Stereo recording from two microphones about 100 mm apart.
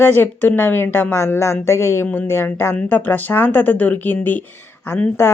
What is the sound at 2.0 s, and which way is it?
A woman's voice, 15° left (ahead or behind).